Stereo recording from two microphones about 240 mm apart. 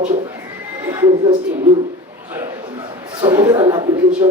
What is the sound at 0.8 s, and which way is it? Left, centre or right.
Speech, centre.